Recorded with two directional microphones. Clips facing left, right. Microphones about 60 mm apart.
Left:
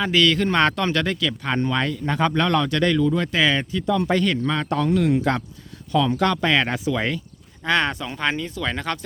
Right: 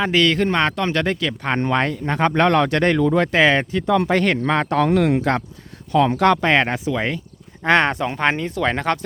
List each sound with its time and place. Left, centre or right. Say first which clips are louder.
0.0 s a man's voice: right 2 dB; right
0.5 s speech: even; right
1.4 s speech: right 3 dB; right
6.5 s speech: right 3 dB; right
7.6 s speech: right 5 dB; right